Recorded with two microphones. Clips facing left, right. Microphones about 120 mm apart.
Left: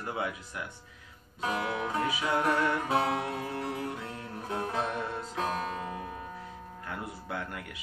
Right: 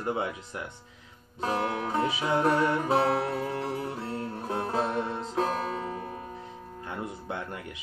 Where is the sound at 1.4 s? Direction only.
40° right (ahead or behind).